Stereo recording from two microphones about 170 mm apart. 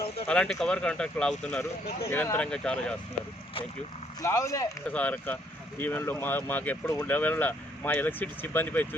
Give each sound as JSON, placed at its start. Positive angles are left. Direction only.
{"t": 0.3, "sound": "speech", "side_deg": 5}
{"t": 4.2, "sound": "speech", "side_deg": 20}